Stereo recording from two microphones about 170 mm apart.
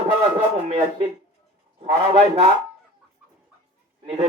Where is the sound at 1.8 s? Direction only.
35° right (ahead or behind).